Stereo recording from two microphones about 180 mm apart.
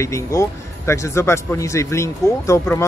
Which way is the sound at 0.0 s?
15° left (ahead or behind).